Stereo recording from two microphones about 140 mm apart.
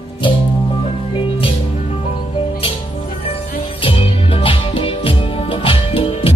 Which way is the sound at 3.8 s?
40° left (ahead or behind).